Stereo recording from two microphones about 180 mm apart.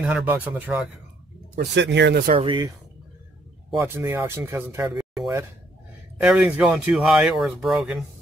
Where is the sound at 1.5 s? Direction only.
75° right (ahead or behind).